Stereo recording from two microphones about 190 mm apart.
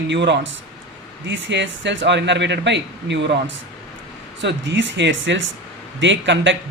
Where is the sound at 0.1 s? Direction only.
70° right (ahead or behind).